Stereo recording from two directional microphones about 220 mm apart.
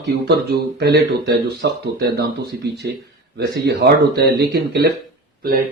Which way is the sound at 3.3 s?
50° right (ahead or behind).